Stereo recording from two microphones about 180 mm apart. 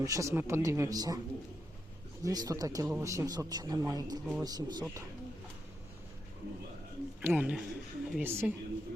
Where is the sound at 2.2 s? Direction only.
20° right (ahead or behind).